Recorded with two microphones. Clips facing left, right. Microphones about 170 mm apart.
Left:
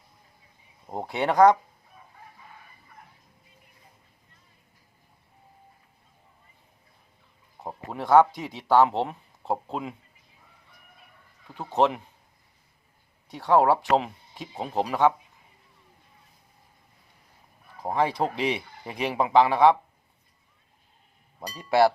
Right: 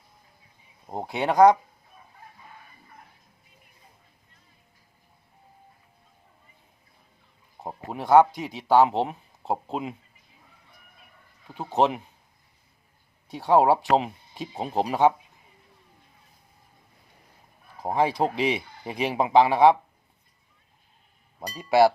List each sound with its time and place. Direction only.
0.9 s speech: 10° right (ahead or behind)
7.6 s a sound: 20° right (ahead or behind)
7.9 s speech: 15° right (ahead or behind)
8.3 s speech: centre (ahead or behind)
9.5 s speech: 20° right (ahead or behind)
11.4 s speech: 20° right (ahead or behind)
13.3 s speech: 10° right (ahead or behind)
17.8 s speech: 10° right (ahead or behind)
21.4 s speech: 15° right (ahead or behind)